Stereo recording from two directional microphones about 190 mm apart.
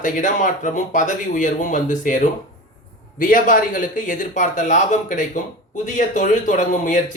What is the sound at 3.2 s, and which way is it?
Speech, 45° left (ahead or behind).